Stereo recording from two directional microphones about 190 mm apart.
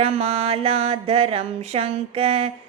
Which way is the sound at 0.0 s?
35° right (ahead or behind).